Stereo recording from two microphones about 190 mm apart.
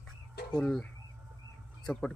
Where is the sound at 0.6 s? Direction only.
5° left (ahead or behind).